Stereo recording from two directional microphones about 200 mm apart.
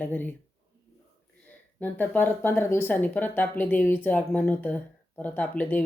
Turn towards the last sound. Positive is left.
turn(degrees=10)  # may be behind; listen again after turning